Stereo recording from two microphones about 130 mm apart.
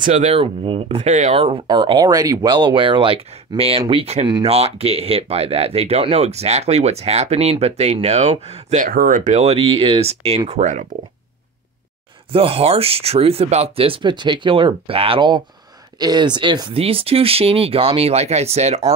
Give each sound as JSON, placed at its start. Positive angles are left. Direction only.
{"t": 0.0, "sound": "speech", "side_deg": -60}
{"t": 0.4, "sound": "speech", "side_deg": -45}
{"t": 8.7, "sound": "speech", "side_deg": -90}
{"t": 12.3, "sound": "speech", "side_deg": -45}